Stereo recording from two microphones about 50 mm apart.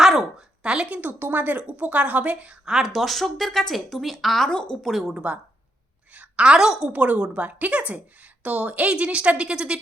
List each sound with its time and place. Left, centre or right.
0.0 s a sound: centre
0.6 s a woman's voice: centre
1.0 s a woman's voice: right
2.6 s speech: centre
4.4 s speech: centre
4.8 s speech: centre
5.1 s a woman's voice: right
6.9 s a woman's voice: right